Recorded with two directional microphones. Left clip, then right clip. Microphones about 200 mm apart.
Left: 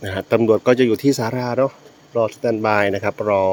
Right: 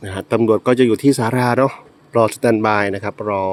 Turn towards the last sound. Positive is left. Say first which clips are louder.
# left 3 dB
turn(degrees=0)  # may be behind; listen again after turning